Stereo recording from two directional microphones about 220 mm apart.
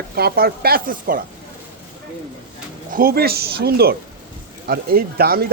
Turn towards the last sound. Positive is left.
turn(degrees=-45)  # may be behind; listen again after turning